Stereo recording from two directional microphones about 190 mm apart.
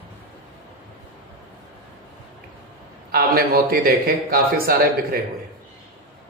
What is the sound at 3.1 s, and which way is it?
A man's voice, 55° right (ahead or behind).